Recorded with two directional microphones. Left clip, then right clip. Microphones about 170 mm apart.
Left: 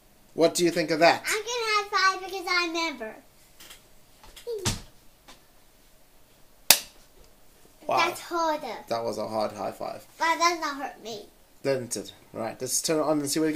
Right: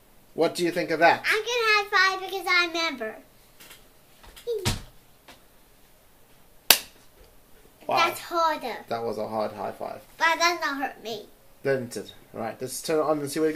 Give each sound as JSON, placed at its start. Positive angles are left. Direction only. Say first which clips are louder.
{"t": 0.4, "sound": "speech", "louder": "left 2 dB", "side_deg": 45}
{"t": 1.2, "sound": "a sound", "louder": "right 5 dB", "side_deg": 15}
{"t": 7.9, "sound": "a child's voice", "louder": "right 2 dB", "side_deg": 15}
{"t": 8.8, "sound": "speech", "louder": "left 1 dB", "side_deg": 45}
{"t": 10.1, "sound": "a child's voice", "louder": "right 1 dB", "side_deg": 15}
{"t": 11.6, "sound": "speech", "louder": "right 1 dB", "side_deg": 45}